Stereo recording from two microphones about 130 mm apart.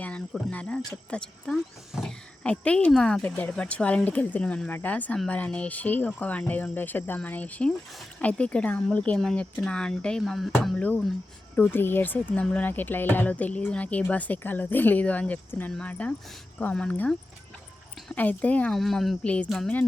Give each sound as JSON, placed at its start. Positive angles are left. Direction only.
{"t": 0.0, "sound": "speech", "side_deg": 10}
{"t": 10.8, "sound": "speech", "side_deg": 10}
{"t": 18.8, "sound": "speech", "side_deg": 0}